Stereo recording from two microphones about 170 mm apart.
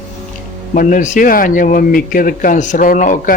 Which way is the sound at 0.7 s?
50° left (ahead or behind).